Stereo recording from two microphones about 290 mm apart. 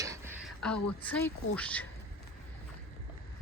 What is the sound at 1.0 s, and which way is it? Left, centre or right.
Speech, centre.